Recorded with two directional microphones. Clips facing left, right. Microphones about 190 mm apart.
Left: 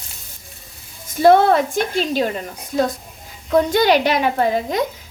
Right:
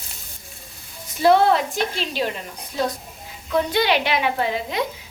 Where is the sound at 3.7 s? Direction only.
45° left (ahead or behind).